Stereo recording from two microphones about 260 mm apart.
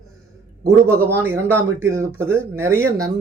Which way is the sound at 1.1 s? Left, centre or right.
Centre.